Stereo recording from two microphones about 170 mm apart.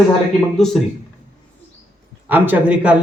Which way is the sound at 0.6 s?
Centre (ahead or behind).